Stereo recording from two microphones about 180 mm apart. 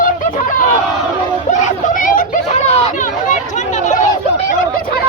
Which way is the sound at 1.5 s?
45° left (ahead or behind).